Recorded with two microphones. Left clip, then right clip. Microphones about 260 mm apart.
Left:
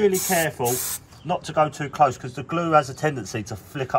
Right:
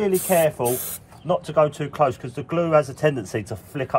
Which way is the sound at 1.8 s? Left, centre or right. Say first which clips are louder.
Left 1 dB; centre.